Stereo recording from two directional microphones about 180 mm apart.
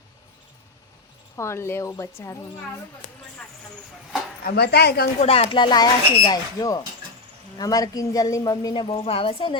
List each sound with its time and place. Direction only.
1.4 s speech: 15° left (ahead or behind)
4.4 s speech: 65° left (ahead or behind)
5.2 s a woman's voice: 35° left (ahead or behind)